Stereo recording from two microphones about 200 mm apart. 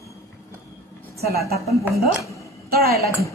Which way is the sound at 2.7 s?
50° right (ahead or behind).